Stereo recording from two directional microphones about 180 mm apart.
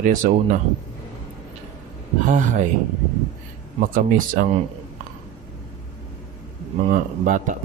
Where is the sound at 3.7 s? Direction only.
50° right (ahead or behind).